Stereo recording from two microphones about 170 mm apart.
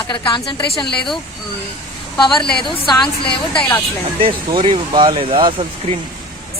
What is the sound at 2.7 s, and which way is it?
Speech, 30° left (ahead or behind).